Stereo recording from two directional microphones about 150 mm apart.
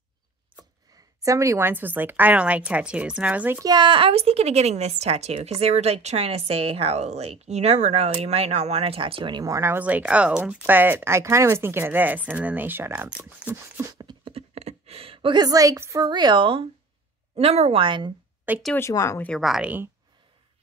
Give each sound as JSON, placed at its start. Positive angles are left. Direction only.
{"t": 1.2, "sound": "a woman's voice", "side_deg": -20}
{"t": 3.6, "sound": "a woman's voice", "side_deg": -30}
{"t": 13.9, "sound": "a sound", "side_deg": -35}
{"t": 15.4, "sound": "a woman's voice", "side_deg": -25}
{"t": 18.8, "sound": "speech", "side_deg": 20}
{"t": 19.2, "sound": "speech", "side_deg": 0}